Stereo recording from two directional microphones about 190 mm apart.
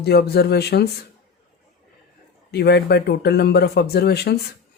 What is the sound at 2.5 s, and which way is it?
Speech, 60° left (ahead or behind).